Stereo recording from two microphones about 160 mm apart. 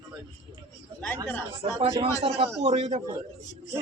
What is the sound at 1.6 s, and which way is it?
A man's voice, 40° right (ahead or behind).